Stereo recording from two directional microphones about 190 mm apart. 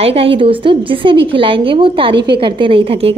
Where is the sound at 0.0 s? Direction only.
30° right (ahead or behind).